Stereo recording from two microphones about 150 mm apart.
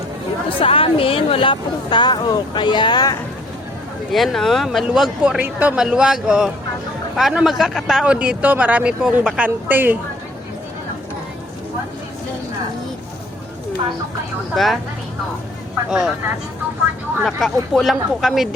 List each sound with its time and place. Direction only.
0.6 s speech: 40° left (ahead or behind)
4.1 s a woman's voice: centre (ahead or behind)
14.5 s speech: centre (ahead or behind)
15.9 s speech: 5° right (ahead or behind)
17.2 s speech: centre (ahead or behind)